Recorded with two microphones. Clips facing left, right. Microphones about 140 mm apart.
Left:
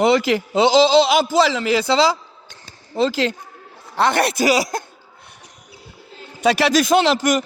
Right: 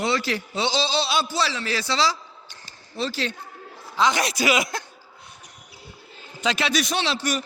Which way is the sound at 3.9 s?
60° left (ahead or behind).